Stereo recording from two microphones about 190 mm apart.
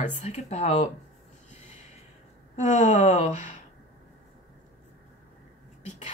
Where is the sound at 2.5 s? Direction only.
40° left (ahead or behind).